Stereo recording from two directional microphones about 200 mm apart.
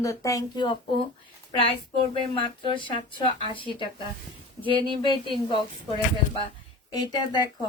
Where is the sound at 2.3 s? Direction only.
25° left (ahead or behind).